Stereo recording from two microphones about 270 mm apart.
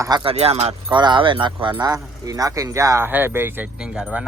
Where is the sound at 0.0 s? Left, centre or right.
Centre.